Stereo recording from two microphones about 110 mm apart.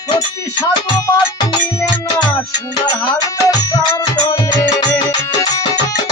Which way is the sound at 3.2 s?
35° left (ahead or behind).